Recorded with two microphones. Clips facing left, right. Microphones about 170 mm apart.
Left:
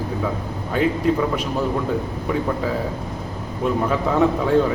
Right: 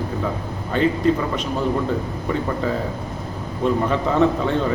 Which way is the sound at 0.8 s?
10° left (ahead or behind).